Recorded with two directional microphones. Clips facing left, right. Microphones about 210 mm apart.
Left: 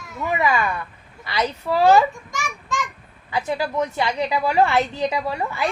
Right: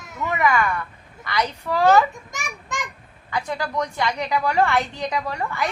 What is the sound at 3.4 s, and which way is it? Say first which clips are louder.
A woman's voice: left 3 dB; 25° left (ahead or behind).